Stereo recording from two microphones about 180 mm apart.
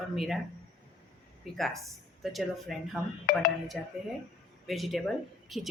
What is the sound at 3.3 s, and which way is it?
Speech, 50° left (ahead or behind).